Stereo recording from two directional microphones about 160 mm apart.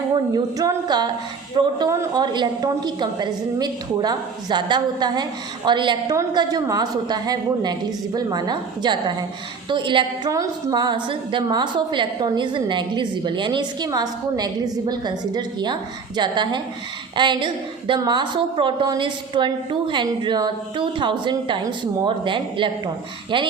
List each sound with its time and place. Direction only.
0.3 s a woman's voice: 25° right (ahead or behind)